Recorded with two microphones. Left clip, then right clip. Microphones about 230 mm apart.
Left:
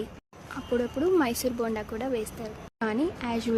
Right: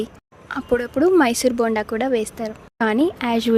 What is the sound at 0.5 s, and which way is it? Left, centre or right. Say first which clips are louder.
A woman's voice: right 8 dB; right.